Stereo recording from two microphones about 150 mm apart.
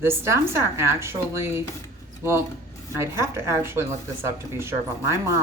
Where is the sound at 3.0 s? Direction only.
20° right (ahead or behind).